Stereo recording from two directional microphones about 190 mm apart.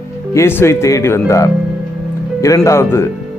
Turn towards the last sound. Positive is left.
turn(degrees=15)  # may be behind; listen again after turning